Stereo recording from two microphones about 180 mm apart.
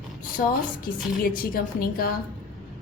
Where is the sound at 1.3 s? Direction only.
55° left (ahead or behind).